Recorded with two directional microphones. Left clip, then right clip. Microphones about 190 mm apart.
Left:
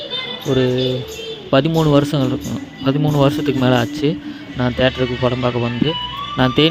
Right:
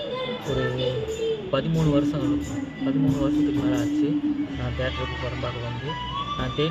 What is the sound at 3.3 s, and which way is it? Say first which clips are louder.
Speech: left 7 dB; 50° left (ahead or behind).